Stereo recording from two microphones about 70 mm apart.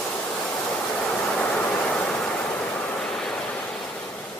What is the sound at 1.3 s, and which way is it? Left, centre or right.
Vehicle, centre.